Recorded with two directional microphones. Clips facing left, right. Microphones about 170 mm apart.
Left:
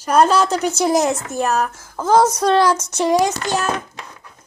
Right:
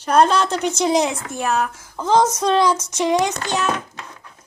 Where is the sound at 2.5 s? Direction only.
15° right (ahead or behind).